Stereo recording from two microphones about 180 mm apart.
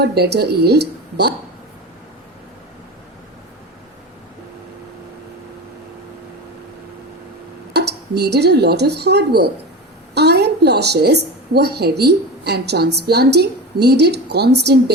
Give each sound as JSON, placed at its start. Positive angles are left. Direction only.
{"t": 0.0, "sound": "speech", "side_deg": -65}
{"t": 7.7, "sound": "a woman's voice", "side_deg": -65}